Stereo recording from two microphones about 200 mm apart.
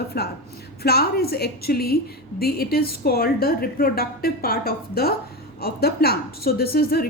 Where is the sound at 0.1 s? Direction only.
50° left (ahead or behind).